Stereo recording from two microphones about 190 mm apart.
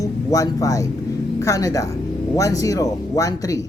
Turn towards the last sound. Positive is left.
turn(degrees=15)  # may be behind; listen again after turning